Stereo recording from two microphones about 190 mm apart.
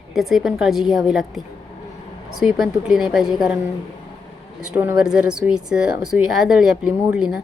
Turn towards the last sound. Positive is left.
turn(degrees=-5)  # may be behind; listen again after turning